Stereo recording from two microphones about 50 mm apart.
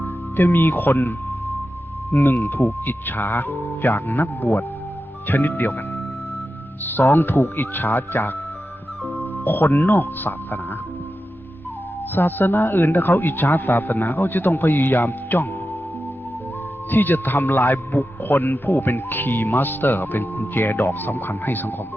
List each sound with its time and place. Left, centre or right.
0.0 s a man's voice: left
7.0 s speech: left
9.4 s a man's voice: left
12.1 s a man's voice: left
16.9 s a man's voice: left